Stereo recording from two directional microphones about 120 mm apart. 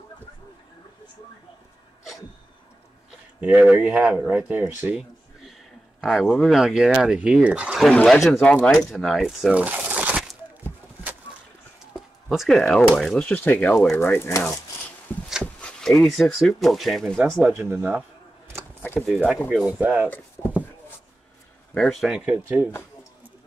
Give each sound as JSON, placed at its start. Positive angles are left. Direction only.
{"t": 3.3, "sound": "speech", "side_deg": -15}
{"t": 5.9, "sound": "speech", "side_deg": 0}
{"t": 7.8, "sound": "speech", "side_deg": 5}
{"t": 9.5, "sound": "a sound", "side_deg": -10}
{"t": 11.9, "sound": "speech", "side_deg": 0}
{"t": 15.6, "sound": "speech", "side_deg": 5}
{"t": 17.6, "sound": "speech", "side_deg": -15}
{"t": 18.9, "sound": "speech", "side_deg": 0}
{"t": 19.8, "sound": "speech", "side_deg": -15}
{"t": 21.7, "sound": "speech", "side_deg": 0}